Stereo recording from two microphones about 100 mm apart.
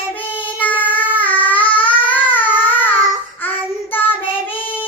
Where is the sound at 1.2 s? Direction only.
15° left (ahead or behind).